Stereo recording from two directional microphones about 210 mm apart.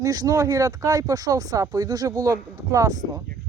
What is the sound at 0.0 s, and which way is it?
Speech, 15° right (ahead or behind).